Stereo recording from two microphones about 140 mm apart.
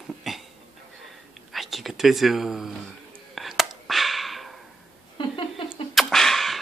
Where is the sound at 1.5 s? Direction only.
Centre (ahead or behind).